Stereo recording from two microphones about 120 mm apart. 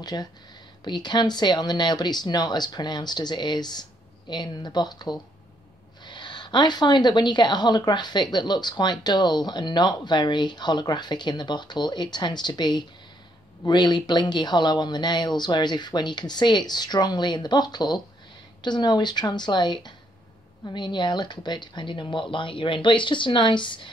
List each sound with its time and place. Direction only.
0.0 s a woman's voice: 35° left (ahead or behind)